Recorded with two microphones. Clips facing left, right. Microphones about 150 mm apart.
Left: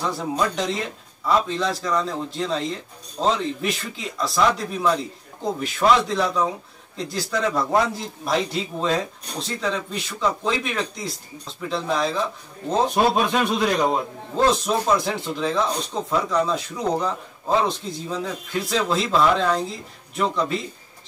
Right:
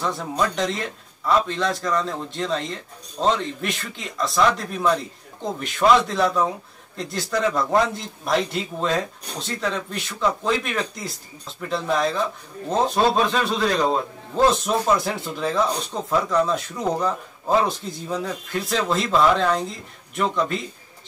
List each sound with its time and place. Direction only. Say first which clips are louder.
0.2 s speech: even; centre (ahead or behind)
12.9 s speech: right 1 dB; 15° left (ahead or behind)
14.3 s speech: right 1 dB; centre (ahead or behind)